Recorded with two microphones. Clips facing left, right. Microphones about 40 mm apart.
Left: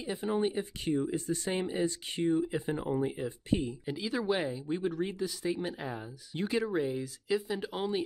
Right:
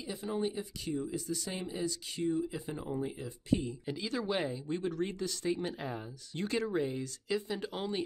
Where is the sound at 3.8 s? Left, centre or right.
Centre.